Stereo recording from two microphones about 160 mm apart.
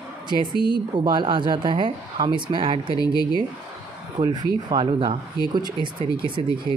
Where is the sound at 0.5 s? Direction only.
30° left (ahead or behind).